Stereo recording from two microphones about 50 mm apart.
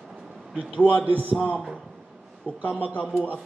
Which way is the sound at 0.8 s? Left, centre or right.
Left.